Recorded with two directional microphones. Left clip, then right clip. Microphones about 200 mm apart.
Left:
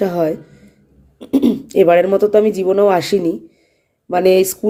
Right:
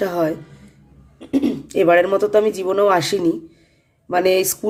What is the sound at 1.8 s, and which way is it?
Speech, 15° left (ahead or behind).